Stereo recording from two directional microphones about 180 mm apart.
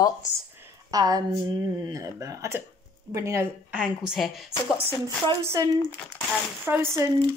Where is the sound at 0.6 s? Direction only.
20° right (ahead or behind).